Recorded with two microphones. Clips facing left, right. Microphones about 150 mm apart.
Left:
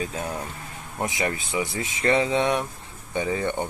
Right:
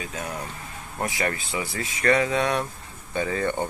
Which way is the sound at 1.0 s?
20° left (ahead or behind).